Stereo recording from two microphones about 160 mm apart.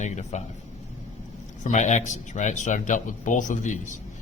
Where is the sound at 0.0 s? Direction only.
45° left (ahead or behind).